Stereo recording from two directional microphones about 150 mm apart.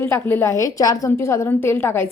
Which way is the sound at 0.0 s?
15° left (ahead or behind).